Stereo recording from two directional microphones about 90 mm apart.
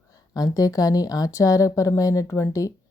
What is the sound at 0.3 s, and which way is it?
Speech, 40° left (ahead or behind).